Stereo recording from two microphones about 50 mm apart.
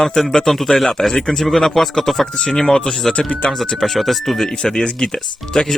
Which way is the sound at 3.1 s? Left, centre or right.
Left.